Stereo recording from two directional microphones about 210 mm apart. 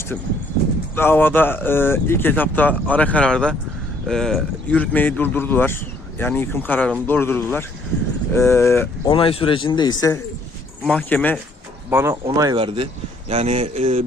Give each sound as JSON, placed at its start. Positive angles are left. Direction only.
{"t": 0.9, "sound": "speech", "side_deg": 10}
{"t": 9.1, "sound": "a man's voice", "side_deg": 25}
{"t": 10.8, "sound": "speech", "side_deg": 5}
{"t": 11.9, "sound": "speech", "side_deg": -10}
{"t": 12.2, "sound": "speech", "side_deg": -20}